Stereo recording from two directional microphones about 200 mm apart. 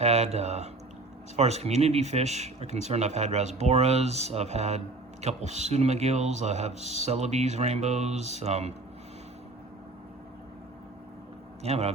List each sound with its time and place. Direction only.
0.0 s speech: 30° right (ahead or behind)
11.6 s speech: 30° right (ahead or behind)